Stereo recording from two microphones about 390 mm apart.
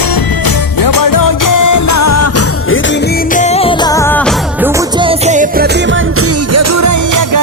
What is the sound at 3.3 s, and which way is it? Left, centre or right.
Music, centre.